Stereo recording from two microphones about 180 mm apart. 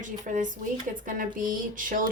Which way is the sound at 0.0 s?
45° right (ahead or behind).